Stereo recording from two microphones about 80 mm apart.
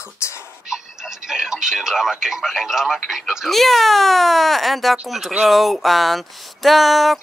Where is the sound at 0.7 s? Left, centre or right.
Centre.